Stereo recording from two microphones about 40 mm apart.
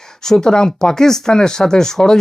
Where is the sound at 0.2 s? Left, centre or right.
Centre.